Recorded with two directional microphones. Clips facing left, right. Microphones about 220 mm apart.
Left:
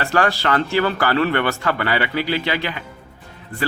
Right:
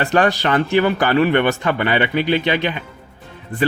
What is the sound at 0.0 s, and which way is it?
A man's voice, 20° right (ahead or behind).